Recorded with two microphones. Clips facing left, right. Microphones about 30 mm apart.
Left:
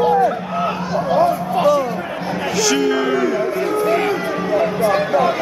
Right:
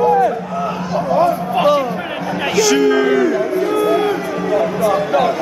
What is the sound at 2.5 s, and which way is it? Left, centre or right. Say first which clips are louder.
Music: right 4 dB; centre.